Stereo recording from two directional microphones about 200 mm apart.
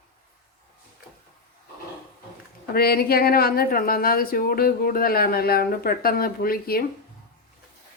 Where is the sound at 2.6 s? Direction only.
50° left (ahead or behind).